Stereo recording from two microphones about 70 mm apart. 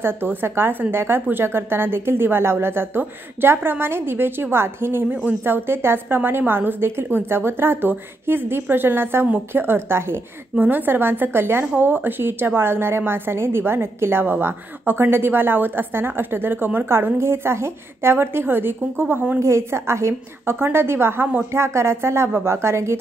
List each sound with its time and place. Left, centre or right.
0.0 s speech: right
19.4 s speech: right